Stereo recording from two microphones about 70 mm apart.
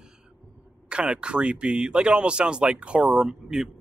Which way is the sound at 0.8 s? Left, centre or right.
Centre.